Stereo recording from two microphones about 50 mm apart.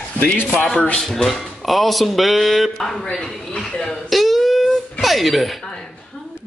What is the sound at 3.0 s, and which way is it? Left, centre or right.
Speech, left.